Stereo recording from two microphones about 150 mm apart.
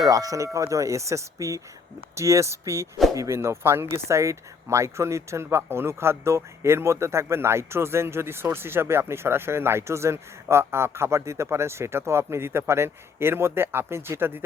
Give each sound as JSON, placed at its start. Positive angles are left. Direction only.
{"t": 0.0, "sound": "speech", "side_deg": -25}